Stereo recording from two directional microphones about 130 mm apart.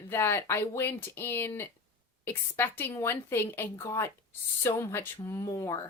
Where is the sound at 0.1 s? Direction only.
20° left (ahead or behind).